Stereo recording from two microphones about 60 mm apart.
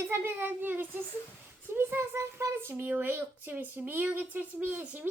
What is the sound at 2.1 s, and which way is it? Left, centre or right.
Speech, right.